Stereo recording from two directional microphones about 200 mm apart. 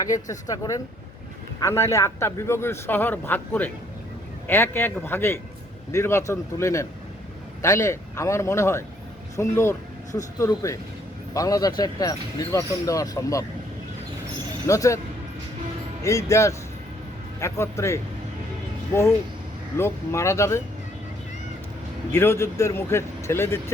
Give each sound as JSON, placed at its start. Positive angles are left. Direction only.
{"t": 0.1, "sound": "a man's voice", "side_deg": 15}
{"t": 14.7, "sound": "a man's voice", "side_deg": 15}
{"t": 16.0, "sound": "a man's voice", "side_deg": 15}
{"t": 19.7, "sound": "a man's voice", "side_deg": 15}
{"t": 22.1, "sound": "a man's voice", "side_deg": 10}